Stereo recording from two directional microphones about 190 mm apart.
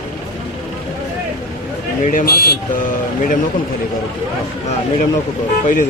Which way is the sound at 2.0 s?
50° left (ahead or behind).